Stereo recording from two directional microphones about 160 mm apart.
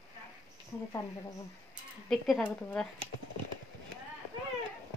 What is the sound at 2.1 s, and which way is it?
Speech, centre (ahead or behind).